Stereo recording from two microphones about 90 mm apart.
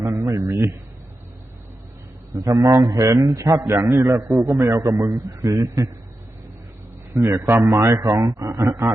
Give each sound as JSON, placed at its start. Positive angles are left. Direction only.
{"t": 0.0, "sound": "a sound", "side_deg": -30}
{"t": 2.3, "sound": "a man's voice", "side_deg": -40}
{"t": 7.1, "sound": "a man's voice", "side_deg": -30}
{"t": 8.4, "sound": "a man's voice", "side_deg": -30}